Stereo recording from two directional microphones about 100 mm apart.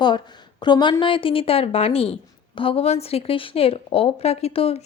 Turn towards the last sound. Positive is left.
turn(degrees=80)